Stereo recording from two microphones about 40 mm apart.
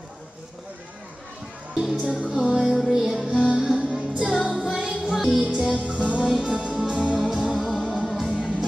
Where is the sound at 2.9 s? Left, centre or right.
Centre.